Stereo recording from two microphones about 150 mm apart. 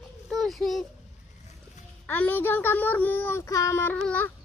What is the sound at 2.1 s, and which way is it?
Child singing, 10° left (ahead or behind).